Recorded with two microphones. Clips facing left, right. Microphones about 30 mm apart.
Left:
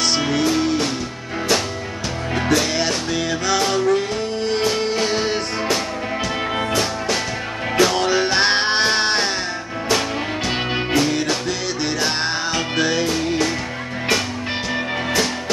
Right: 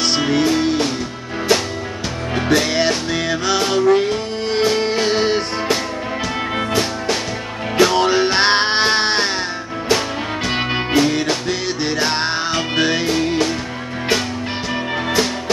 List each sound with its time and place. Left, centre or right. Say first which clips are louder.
0.1 s music: right 2 dB; centre
2.5 s music: right 4 dB; right
10.7 s music: right 3 dB; centre